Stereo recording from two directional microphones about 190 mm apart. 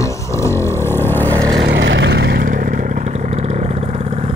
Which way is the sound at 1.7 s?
70° right (ahead or behind).